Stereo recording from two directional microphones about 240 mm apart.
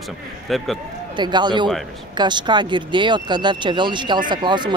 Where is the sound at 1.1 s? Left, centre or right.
Centre.